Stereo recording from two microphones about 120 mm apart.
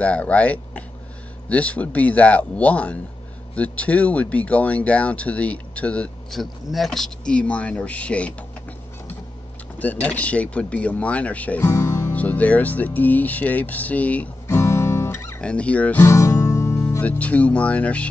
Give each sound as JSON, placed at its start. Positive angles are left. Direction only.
{"t": 0.0, "sound": "speech", "side_deg": 10}
{"t": 9.8, "sound": "speech", "side_deg": 15}
{"t": 11.6, "sound": "music", "side_deg": 25}
{"t": 12.1, "sound": "speech", "side_deg": 15}
{"t": 14.5, "sound": "guitar", "side_deg": 20}
{"t": 15.4, "sound": "speech", "side_deg": 10}
{"t": 16.1, "sound": "speech", "side_deg": 25}